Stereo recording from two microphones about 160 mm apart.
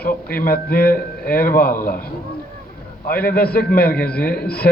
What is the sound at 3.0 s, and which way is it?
A man's voice, 65° left (ahead or behind).